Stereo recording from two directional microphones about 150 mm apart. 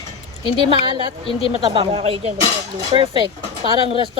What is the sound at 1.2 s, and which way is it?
Speech, 40° left (ahead or behind).